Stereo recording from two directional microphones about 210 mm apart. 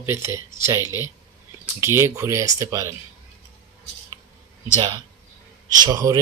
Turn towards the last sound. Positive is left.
turn(degrees=-20)  # may be behind; listen again after turning